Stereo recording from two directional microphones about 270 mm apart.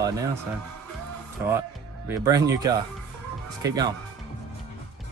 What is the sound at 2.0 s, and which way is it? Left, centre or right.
Speech, centre.